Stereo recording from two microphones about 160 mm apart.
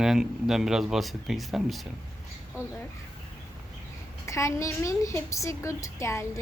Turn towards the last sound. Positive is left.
turn(degrees=15)  # may be behind; listen again after turning